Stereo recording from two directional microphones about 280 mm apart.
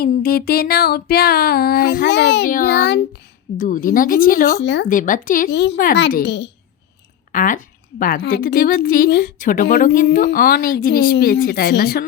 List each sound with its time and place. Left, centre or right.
0.0 s a woman's voice: left